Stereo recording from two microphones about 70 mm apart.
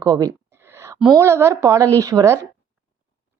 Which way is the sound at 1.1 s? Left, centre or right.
Right.